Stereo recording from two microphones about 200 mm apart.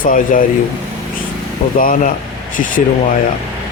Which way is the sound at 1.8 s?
45° left (ahead or behind).